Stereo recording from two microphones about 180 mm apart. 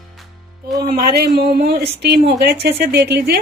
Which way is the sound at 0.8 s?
55° right (ahead or behind).